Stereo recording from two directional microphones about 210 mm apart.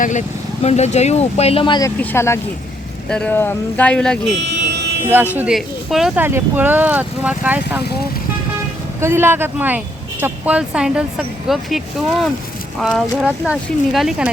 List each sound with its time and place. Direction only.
0.0 s speech: 35° left (ahead or behind)
2.0 s speech: 10° left (ahead or behind)
5.0 s speech: 10° right (ahead or behind)
9.0 s speech: 10° right (ahead or behind)